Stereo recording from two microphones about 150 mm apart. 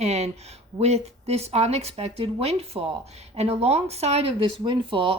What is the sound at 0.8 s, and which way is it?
Speech, 45° right (ahead or behind).